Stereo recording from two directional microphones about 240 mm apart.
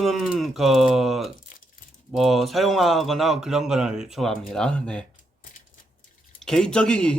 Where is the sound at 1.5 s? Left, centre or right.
Left.